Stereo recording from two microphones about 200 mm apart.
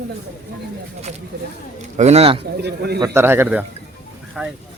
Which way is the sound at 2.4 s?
55° right (ahead or behind).